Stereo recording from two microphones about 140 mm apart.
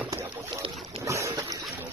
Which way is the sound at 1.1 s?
20° right (ahead or behind).